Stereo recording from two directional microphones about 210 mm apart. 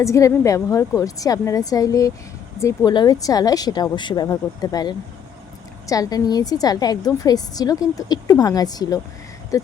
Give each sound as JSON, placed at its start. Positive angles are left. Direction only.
{"t": 0.0, "sound": "a woman's voice", "side_deg": 15}